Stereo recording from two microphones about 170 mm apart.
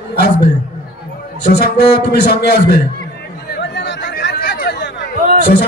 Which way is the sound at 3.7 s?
90° left.